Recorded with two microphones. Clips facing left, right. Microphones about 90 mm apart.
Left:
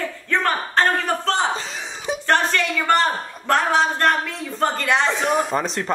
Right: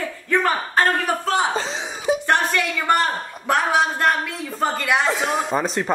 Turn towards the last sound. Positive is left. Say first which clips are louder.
# right 1 dB
turn(degrees=-5)  # may be behind; listen again after turning